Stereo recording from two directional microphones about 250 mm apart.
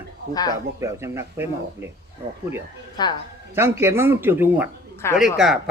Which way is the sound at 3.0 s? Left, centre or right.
Centre.